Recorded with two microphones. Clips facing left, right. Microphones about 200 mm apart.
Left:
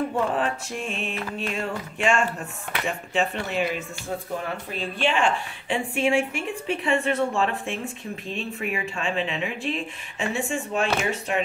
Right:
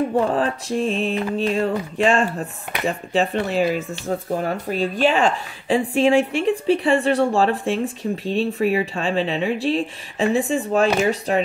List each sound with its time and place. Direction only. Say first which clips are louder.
0.1 s speech: right 5 dB; 35° right (ahead or behind)